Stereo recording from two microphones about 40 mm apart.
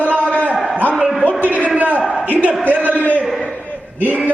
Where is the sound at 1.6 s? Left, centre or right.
Right.